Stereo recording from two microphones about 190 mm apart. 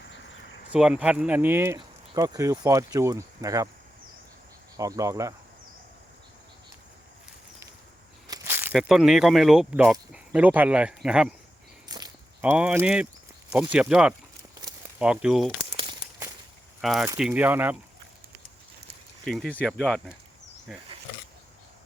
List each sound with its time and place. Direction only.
0.7 s speech: 5° right (ahead or behind)
4.8 s speech: 15° right (ahead or behind)
8.3 s a sound: 10° right (ahead or behind)
8.7 s speech: centre (ahead or behind)
11.9 s a sound: 20° right (ahead or behind)
12.4 s speech: 5° right (ahead or behind)
14.5 s a sound: 10° right (ahead or behind)
15.7 s crumpling: 25° right (ahead or behind)
16.8 s speech: centre (ahead or behind)
19.2 s speech: 5° left (ahead or behind)